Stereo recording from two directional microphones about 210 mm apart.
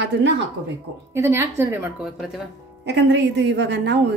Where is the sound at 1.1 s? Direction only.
10° right (ahead or behind).